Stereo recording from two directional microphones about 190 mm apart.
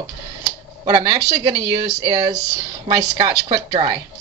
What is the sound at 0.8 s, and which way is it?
A woman's voice, 20° right (ahead or behind).